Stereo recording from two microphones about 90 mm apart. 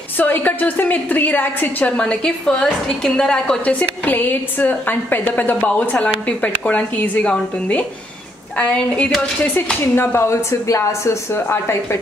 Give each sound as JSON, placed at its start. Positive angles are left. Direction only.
{"t": 0.2, "sound": "a woman's voice", "side_deg": 15}
{"t": 9.8, "sound": "speech", "side_deg": 25}